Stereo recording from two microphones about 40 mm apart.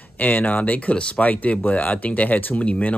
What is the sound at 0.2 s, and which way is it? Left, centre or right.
Speech, left.